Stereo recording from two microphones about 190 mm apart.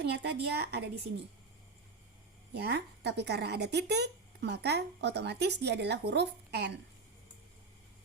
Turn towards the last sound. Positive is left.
turn(degrees=-65)  # may be behind; listen again after turning